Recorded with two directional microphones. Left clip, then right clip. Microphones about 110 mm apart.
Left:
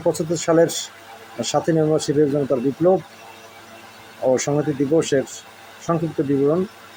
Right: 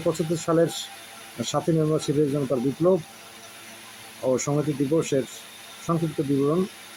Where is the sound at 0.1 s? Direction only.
15° right (ahead or behind).